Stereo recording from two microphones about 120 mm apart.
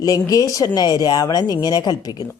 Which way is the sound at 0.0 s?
30° left (ahead or behind).